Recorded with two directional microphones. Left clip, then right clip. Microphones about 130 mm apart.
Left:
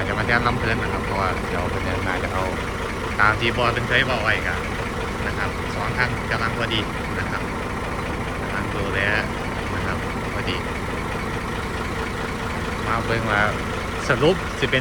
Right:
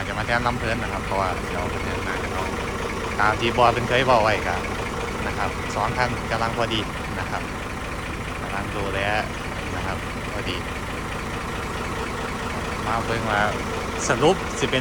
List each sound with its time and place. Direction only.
0.3 s speech: 20° right (ahead or behind)
3.2 s speech: 15° right (ahead or behind)
3.6 s speech: 35° right (ahead or behind)
6.0 s speech: 30° right (ahead or behind)
9.0 s speech: 25° right (ahead or behind)
13.1 s speech: 15° right (ahead or behind)
14.1 s speech: 25° right (ahead or behind)